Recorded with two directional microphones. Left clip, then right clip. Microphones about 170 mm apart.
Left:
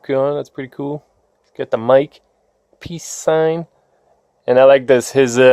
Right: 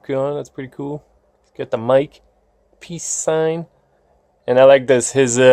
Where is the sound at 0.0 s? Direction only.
25° left (ahead or behind).